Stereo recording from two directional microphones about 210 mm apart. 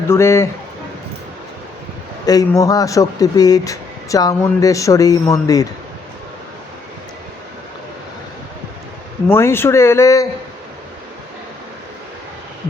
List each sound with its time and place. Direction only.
0.1 s speech: 15° left (ahead or behind)
2.2 s speech: 15° left (ahead or behind)
9.2 s speech: 10° left (ahead or behind)